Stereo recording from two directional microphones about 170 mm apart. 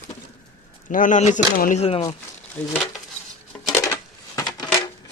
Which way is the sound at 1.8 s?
35° left (ahead or behind).